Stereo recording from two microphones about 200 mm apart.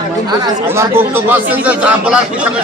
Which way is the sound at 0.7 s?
10° right (ahead or behind).